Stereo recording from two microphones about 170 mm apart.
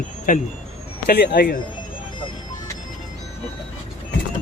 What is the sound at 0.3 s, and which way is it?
Speech, 55° left (ahead or behind).